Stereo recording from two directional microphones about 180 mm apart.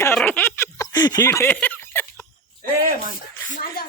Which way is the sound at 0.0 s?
10° left (ahead or behind).